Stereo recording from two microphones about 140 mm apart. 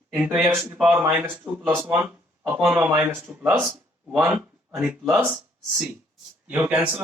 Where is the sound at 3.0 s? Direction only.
20° right (ahead or behind).